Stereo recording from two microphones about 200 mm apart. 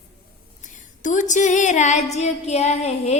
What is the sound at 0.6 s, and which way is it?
A woman's voice, 40° left (ahead or behind).